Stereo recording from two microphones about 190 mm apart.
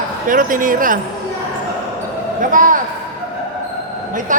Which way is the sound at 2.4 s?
45° right (ahead or behind).